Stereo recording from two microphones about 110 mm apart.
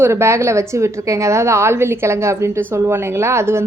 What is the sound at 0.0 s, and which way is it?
A woman's voice, 25° right (ahead or behind).